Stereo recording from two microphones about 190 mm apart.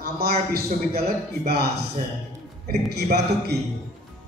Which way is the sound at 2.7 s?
55° right (ahead or behind).